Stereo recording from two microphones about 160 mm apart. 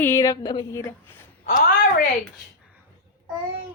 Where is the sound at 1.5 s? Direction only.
65° left (ahead or behind).